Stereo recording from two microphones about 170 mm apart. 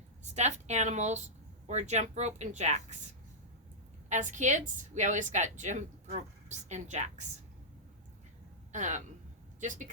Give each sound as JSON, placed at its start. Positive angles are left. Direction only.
{"t": 0.3, "sound": "a woman's voice", "side_deg": -40}
{"t": 4.1, "sound": "a woman's voice", "side_deg": -45}
{"t": 8.7, "sound": "a woman's voice", "side_deg": -45}